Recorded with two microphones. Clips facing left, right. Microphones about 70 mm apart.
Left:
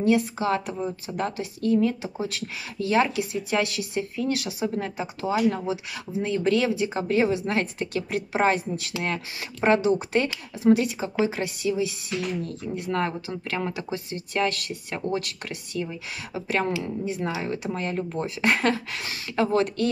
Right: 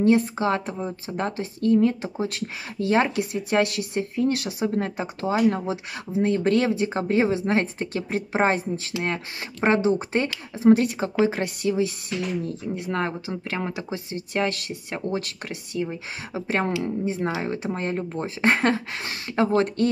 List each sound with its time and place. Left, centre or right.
0.0 s speech: right
12.4 s speech: right
15.9 s speech: right